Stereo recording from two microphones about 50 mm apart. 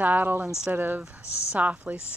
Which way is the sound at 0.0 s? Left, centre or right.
Right.